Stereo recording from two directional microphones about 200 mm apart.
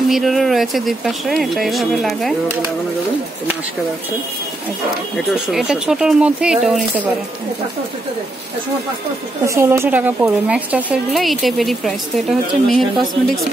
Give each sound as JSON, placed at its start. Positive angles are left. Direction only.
{"t": 0.1, "sound": "speech", "side_deg": 0}
{"t": 5.1, "sound": "speech", "side_deg": 0}
{"t": 9.4, "sound": "speech", "side_deg": -15}